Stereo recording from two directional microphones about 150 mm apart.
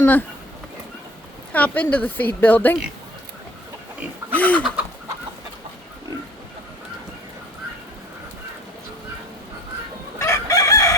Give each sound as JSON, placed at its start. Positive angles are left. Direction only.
{"t": 0.0, "sound": "speech", "side_deg": 15}
{"t": 1.5, "sound": "a woman's voice", "side_deg": 10}
{"t": 4.4, "sound": "a woman's voice", "side_deg": 10}
{"t": 10.2, "sound": "chicken", "side_deg": 20}